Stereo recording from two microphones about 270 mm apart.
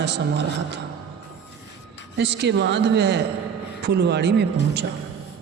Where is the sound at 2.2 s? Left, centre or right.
Right.